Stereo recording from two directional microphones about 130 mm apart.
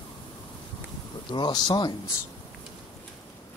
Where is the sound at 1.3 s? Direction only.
35° left (ahead or behind).